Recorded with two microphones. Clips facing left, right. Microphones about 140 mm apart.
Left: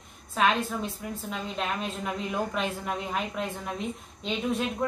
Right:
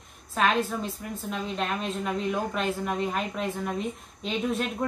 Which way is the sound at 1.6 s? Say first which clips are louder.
Right 1 dB; centre (ahead or behind).